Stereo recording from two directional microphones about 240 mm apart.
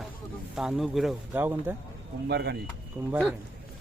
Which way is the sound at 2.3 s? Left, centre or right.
Right.